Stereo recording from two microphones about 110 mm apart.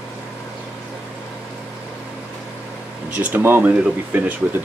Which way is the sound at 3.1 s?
15° right (ahead or behind).